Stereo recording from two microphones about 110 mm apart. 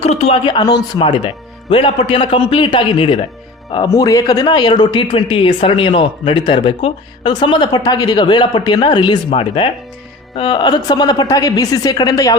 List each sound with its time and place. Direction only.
0.0 s speech: 70° left (ahead or behind)
0.4 s speech: 40° left (ahead or behind)
1.0 s speech: 55° left (ahead or behind)
3.8 s speech: 30° left (ahead or behind)
9.3 s speech: 55° left (ahead or behind)
10.3 s a woman's voice: 40° left (ahead or behind)